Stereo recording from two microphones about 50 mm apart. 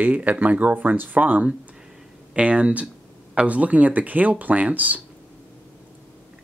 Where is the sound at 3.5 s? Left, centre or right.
Right.